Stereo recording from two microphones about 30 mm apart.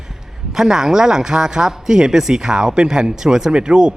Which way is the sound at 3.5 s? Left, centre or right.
Right.